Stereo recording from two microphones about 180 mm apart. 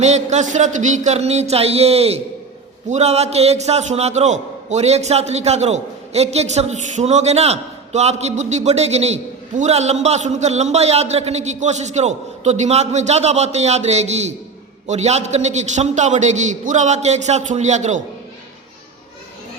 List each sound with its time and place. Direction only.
0.0 s a man's voice: 40° right (ahead or behind)